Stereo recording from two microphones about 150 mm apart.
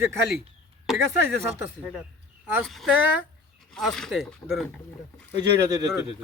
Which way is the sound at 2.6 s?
Centre (ahead or behind).